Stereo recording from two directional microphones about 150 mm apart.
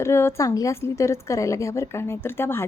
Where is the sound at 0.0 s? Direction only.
20° left (ahead or behind).